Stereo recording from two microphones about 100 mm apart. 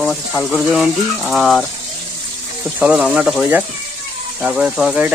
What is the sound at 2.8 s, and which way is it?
Speech, 10° right (ahead or behind).